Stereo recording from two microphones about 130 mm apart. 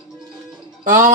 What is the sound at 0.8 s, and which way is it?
Music, 80° right.